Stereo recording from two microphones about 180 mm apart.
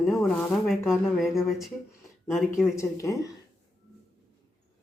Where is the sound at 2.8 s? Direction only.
15° left (ahead or behind).